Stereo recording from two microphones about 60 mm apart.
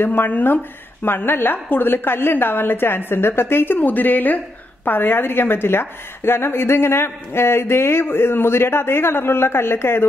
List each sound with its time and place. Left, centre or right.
0.0 s a woman's voice: left